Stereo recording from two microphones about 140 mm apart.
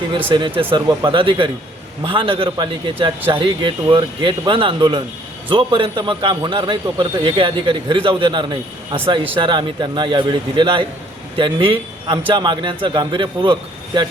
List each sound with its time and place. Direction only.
0.3 s a man's voice: 35° right (ahead or behind)